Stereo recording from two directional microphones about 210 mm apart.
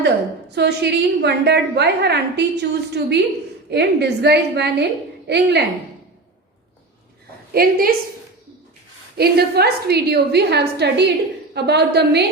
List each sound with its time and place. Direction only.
0.5 s a woman's voice: 50° right (ahead or behind)
7.5 s a woman's voice: 45° right (ahead or behind)
9.1 s a woman's voice: 50° right (ahead or behind)